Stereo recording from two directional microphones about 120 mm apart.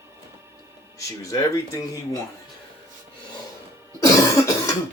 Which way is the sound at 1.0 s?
25° left (ahead or behind).